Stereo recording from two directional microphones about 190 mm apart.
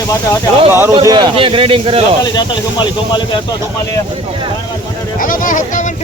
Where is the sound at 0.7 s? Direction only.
10° right (ahead or behind).